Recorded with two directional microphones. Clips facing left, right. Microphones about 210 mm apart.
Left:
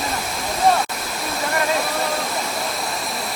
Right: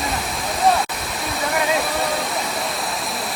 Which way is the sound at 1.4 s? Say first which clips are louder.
Right 1 dB; centre (ahead or behind).